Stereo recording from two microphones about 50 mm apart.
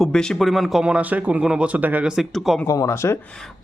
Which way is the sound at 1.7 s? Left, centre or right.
Right.